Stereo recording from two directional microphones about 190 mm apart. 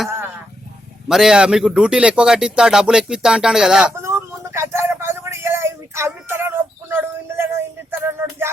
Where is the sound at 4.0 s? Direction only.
15° right (ahead or behind).